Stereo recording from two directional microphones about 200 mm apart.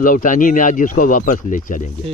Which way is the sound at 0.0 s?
40° left (ahead or behind).